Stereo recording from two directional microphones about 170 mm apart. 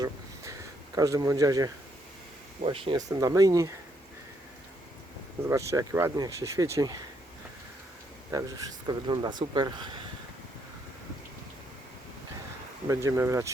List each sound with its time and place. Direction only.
0.9 s speech: 20° right (ahead or behind)
5.5 s speech: 15° right (ahead or behind)
8.3 s speech: 20° right (ahead or behind)
12.9 s speech: 15° right (ahead or behind)